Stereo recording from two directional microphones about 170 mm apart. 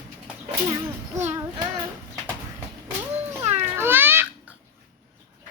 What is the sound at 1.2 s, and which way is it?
Child singing, 20° right (ahead or behind).